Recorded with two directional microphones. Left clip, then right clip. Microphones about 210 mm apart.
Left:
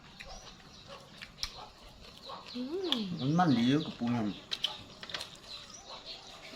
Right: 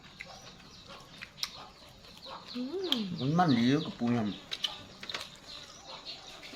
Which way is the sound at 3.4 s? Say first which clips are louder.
Right 1 dB; 20° right (ahead or behind).